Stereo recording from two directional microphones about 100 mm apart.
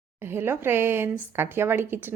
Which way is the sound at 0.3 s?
20° right (ahead or behind).